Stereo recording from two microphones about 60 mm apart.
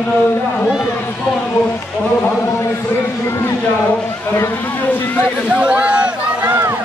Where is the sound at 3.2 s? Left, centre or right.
Left.